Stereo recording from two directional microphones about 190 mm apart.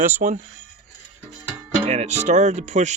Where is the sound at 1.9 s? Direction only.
35° right (ahead or behind).